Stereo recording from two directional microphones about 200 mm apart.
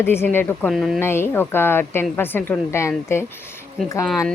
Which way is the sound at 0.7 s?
Centre (ahead or behind).